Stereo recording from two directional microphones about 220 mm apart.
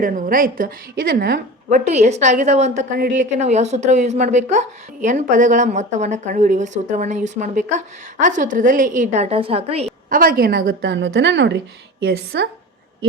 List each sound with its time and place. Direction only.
0.0 s a woman's voice: 40° right (ahead or behind)
1.7 s a woman's voice: 30° right (ahead or behind)
10.1 s a woman's voice: 40° right (ahead or behind)